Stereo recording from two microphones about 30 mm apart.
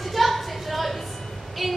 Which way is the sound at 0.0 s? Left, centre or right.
Centre.